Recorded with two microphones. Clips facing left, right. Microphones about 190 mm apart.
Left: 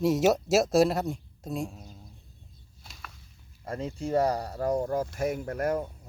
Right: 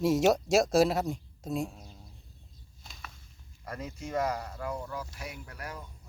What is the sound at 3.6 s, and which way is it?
Speech, 30° left (ahead or behind).